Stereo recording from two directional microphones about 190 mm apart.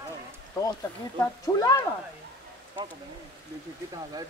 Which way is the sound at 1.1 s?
20° left (ahead or behind).